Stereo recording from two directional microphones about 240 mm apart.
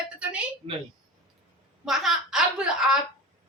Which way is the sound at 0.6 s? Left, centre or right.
Right.